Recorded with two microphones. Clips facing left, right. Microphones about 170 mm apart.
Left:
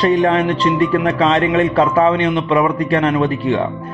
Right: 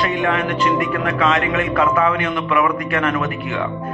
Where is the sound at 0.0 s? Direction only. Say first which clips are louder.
Left 6 dB; 35° left (ahead or behind).